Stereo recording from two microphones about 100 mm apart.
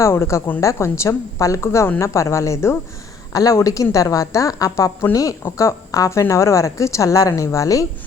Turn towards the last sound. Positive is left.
turn(degrees=35)  # may be behind; listen again after turning